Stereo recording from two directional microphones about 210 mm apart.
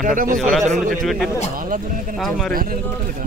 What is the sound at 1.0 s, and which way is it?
Speech, centre (ahead or behind).